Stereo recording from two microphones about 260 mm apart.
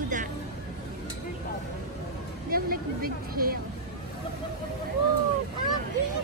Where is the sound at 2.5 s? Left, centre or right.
Right.